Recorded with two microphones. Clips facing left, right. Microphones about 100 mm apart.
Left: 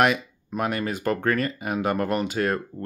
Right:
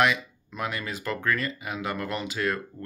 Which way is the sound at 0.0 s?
45° left (ahead or behind).